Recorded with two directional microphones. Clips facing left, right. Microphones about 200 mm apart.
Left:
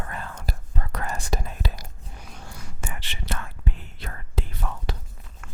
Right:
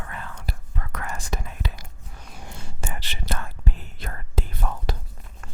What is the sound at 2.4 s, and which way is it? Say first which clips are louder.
Whispering: right 3 dB; 25° right (ahead or behind).